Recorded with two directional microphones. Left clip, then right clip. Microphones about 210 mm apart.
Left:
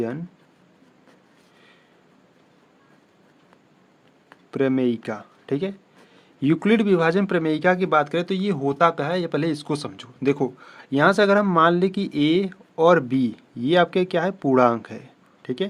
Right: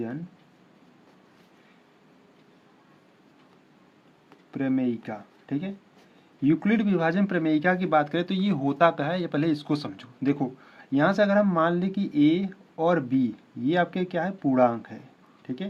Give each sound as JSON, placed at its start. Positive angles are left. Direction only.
{"t": 4.5, "sound": "speech", "side_deg": 45}